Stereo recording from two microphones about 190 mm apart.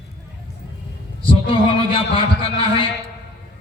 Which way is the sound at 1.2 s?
25° left (ahead or behind).